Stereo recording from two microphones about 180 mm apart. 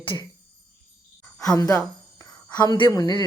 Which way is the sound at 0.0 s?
30° left (ahead or behind).